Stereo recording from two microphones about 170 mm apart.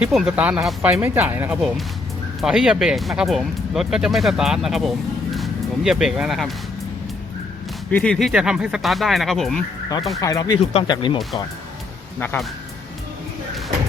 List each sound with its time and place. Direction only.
0.0 s speech: 5° right (ahead or behind)
0.9 s speech: 10° right (ahead or behind)
7.9 s speech: 5° left (ahead or behind)
10.2 s speech: 20° left (ahead or behind)